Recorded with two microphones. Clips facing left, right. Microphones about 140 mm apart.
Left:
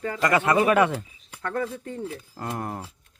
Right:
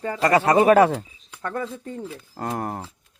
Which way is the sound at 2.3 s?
40° right (ahead or behind).